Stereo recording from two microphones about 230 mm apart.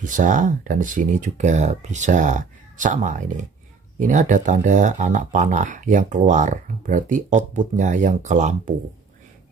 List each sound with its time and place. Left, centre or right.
0.0 s speech: right